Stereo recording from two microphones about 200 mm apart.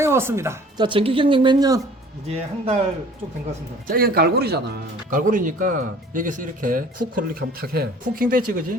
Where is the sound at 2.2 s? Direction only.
30° right (ahead or behind).